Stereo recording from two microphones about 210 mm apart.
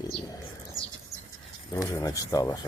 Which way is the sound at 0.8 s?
15° right (ahead or behind).